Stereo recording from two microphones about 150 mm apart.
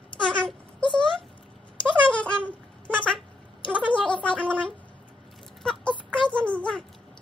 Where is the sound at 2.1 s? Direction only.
10° left (ahead or behind).